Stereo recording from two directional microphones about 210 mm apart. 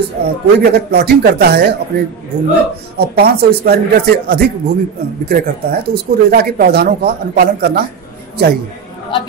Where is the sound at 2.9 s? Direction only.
50° right (ahead or behind).